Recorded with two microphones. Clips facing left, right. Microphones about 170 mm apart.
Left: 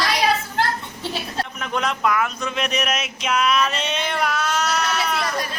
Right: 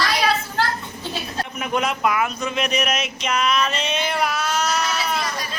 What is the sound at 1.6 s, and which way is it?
Speech, 10° right (ahead or behind).